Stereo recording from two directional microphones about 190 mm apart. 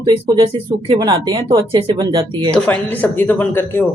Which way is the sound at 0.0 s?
25° right (ahead or behind).